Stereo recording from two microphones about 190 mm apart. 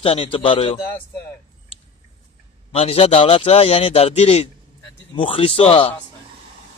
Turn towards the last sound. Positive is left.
turn(degrees=30)  # may be behind; listen again after turning